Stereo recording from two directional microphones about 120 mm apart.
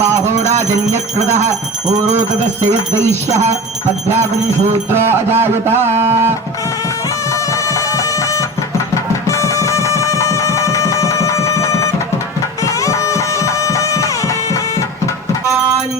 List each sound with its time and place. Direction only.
1.9 s jingle bell: 75° right (ahead or behind)
4.9 s speech: 20° right (ahead or behind)
7.5 s music: 25° left (ahead or behind)